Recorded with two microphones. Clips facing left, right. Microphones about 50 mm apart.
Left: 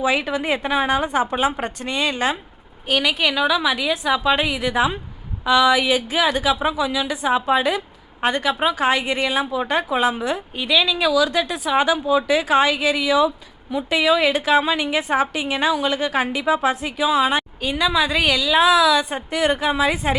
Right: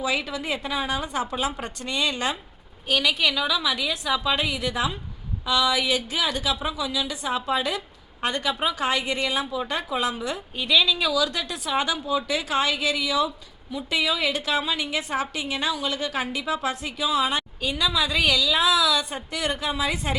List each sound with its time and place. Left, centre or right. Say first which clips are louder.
0.0 s a woman's voice: left 6 dB; left; by 20.1 s centre